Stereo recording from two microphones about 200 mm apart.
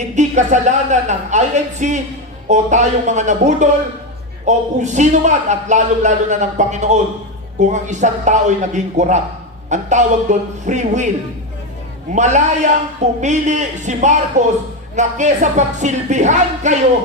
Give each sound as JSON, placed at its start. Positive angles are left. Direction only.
{"t": 0.2, "sound": "a man's voice", "side_deg": -35}
{"t": 12.1, "sound": "a man's voice", "side_deg": -35}